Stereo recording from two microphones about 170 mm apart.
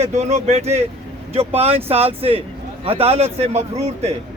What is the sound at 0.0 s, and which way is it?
Speech, 40° right (ahead or behind).